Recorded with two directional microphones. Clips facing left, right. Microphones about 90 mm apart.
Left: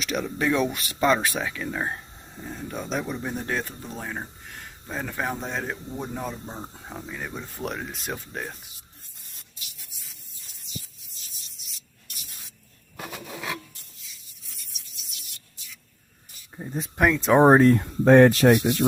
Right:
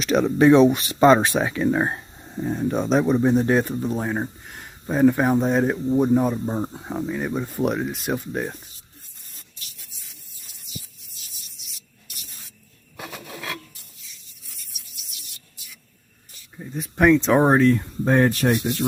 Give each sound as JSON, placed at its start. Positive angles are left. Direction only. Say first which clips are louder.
{"t": 0.0, "sound": "speech", "louder": "right 8 dB", "side_deg": -35}
{"t": 0.3, "sound": "speech", "louder": "right 11 dB", "side_deg": -25}
{"t": 9.9, "sound": "a sound", "louder": "right 1 dB", "side_deg": 0}
{"t": 11.5, "sound": "sanding", "louder": "right 1 dB", "side_deg": 0}
{"t": 13.0, "sound": "filing", "louder": "even", "side_deg": 0}
{"t": 14.0, "sound": "rub", "louder": "right 1 dB", "side_deg": 0}
{"t": 16.6, "sound": "speech", "louder": "even", "side_deg": 30}
{"t": 17.0, "sound": "speech", "louder": "right 3 dB", "side_deg": 5}
{"t": 17.7, "sound": "speech", "louder": "left 5 dB", "side_deg": 70}